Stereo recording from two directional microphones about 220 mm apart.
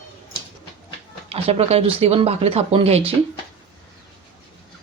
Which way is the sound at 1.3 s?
25° right (ahead or behind).